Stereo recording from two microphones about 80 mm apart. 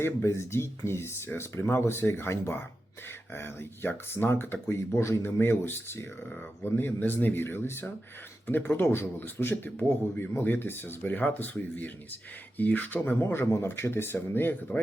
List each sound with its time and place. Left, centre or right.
0.0 s speech: left